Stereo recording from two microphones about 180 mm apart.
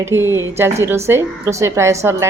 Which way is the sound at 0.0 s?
15° right (ahead or behind).